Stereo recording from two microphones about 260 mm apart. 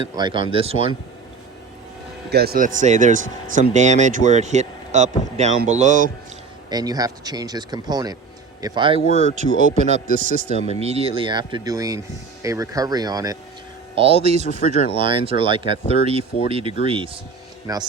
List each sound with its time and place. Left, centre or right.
0.2 s speech: centre
2.3 s speech: right
6.7 s speech: centre
9.4 s a man's voice: left
9.9 s speech: right